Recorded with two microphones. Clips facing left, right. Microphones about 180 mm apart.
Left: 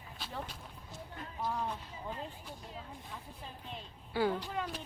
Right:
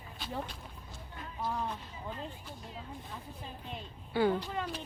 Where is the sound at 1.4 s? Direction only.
5° left (ahead or behind).